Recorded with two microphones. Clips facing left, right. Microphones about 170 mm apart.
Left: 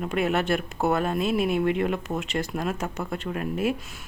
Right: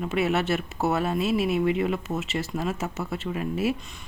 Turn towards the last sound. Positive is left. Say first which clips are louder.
# even
turn(degrees=50)  # may be behind; listen again after turning